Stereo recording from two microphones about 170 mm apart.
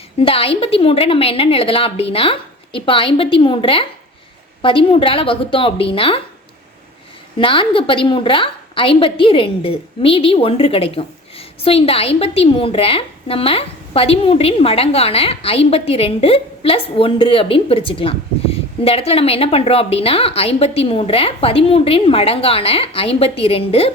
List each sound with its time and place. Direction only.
0.2 s a woman's voice: 35° left (ahead or behind)
7.3 s a woman's voice: 30° left (ahead or behind)